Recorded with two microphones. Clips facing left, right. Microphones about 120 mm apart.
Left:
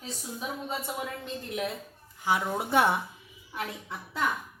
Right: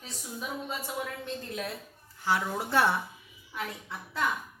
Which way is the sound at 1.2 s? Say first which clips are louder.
Left 2 dB; 20° left (ahead or behind).